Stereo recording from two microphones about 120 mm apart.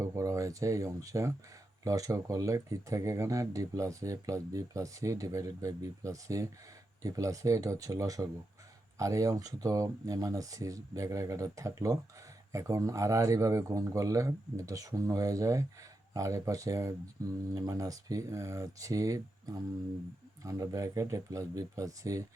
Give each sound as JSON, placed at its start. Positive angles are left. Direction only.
{"t": 0.0, "sound": "speech", "side_deg": -30}